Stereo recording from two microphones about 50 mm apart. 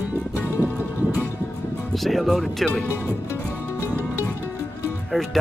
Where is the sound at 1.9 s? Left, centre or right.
Centre.